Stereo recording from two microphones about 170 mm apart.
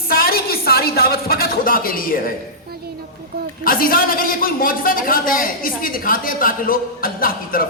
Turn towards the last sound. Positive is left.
turn(degrees=55)  # may be behind; listen again after turning